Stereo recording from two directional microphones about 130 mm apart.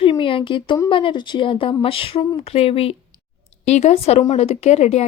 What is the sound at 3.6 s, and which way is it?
Speech, 60° left (ahead or behind).